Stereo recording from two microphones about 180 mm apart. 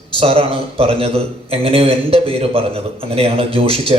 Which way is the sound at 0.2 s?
30° right (ahead or behind).